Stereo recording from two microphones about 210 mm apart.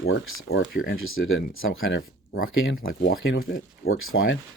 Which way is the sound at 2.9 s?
45° left (ahead or behind).